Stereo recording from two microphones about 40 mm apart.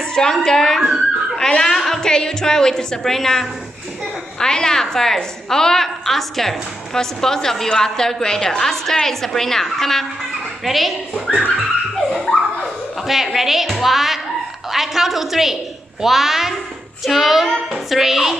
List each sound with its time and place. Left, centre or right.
0.0 s a woman's voice: centre
12.3 s a sound: centre
13.0 s a woman's voice: centre